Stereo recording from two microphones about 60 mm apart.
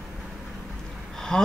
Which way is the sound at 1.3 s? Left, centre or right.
Centre.